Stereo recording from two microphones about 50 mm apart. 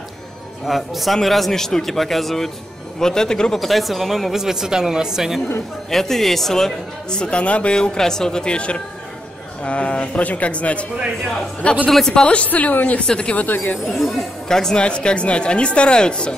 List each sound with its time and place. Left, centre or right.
0.7 s a man's voice: centre
3.5 s speech: centre
5.9 s speech: centre; by 7.7 s left
7.7 s speech: centre
11.9 s speech: centre
12.2 s speech: left
12.4 s a woman's voice: left
13.0 s speech: centre
13.3 s a woman's voice: left
13.8 s a man's voice: centre
14.8 s speech: left